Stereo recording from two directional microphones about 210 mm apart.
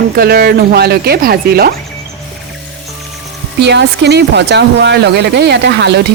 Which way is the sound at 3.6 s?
55° right (ahead or behind).